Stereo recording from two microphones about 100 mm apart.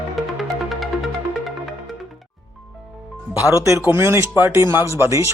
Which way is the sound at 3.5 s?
30° right (ahead or behind).